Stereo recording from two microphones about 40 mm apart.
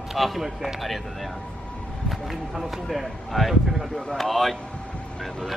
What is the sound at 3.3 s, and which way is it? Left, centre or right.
Speech, centre.